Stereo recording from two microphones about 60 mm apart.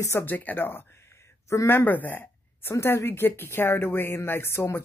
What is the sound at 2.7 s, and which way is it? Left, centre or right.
Speech, left.